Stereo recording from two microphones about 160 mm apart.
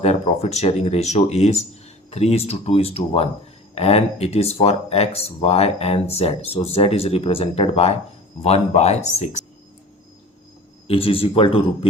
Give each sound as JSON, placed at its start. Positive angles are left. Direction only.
{"t": 0.0, "sound": "speech", "side_deg": 45}
{"t": 10.8, "sound": "speech", "side_deg": 35}